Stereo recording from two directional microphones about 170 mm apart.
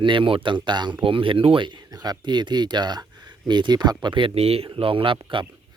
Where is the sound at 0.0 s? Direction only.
30° right (ahead or behind).